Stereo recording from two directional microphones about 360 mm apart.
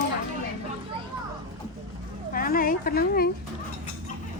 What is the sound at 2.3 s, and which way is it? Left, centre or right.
Speech, left.